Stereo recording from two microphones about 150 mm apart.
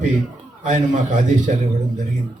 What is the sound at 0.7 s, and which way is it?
Speech, 55° right (ahead or behind).